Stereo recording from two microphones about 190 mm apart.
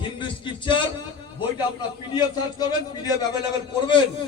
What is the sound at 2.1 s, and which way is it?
Speech, 20° left (ahead or behind).